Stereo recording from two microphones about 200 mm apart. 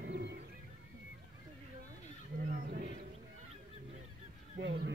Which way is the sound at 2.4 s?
50° right (ahead or behind).